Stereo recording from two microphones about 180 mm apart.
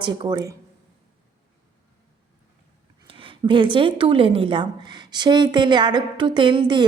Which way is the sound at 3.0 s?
30° right (ahead or behind).